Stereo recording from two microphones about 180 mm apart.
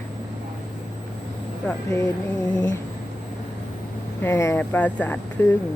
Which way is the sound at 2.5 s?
20° left (ahead or behind).